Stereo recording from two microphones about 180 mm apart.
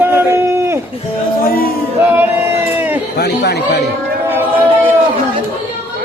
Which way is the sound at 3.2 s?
65° left (ahead or behind).